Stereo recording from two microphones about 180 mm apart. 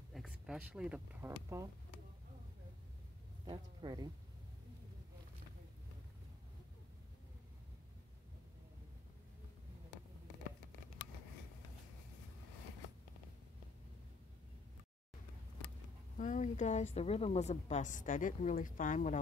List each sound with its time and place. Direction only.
0.1 s speech: centre (ahead or behind)
3.4 s speech: 25° right (ahead or behind)
16.2 s a woman's voice: 45° left (ahead or behind)